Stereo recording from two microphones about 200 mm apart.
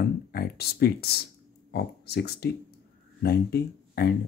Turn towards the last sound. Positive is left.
turn(degrees=55)  # may be behind; listen again after turning